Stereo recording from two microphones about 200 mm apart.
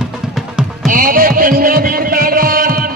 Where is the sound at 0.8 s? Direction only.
45° right (ahead or behind).